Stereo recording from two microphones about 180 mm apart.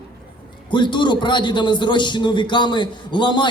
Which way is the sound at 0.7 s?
25° left (ahead or behind).